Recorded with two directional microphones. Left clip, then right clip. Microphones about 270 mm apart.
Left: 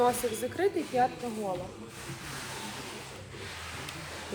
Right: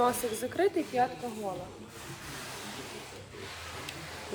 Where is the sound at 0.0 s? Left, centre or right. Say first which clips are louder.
Left 1 dB; centre.